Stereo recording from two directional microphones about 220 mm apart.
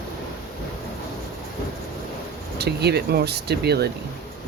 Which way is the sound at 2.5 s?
45° right (ahead or behind).